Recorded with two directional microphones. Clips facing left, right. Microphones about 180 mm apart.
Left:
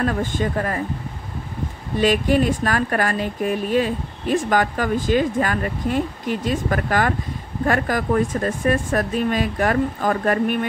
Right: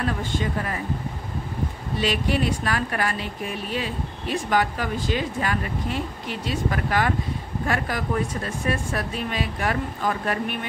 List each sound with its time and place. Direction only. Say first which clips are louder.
0.0 s speech: left 4 dB; 50° left (ahead or behind)
2.0 s speech: left 6 dB; 45° left (ahead or behind)